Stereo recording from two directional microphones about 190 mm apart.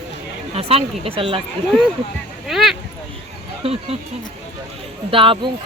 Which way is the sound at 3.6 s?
30° right (ahead or behind).